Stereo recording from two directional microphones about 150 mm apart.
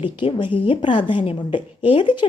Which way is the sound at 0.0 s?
35° left (ahead or behind).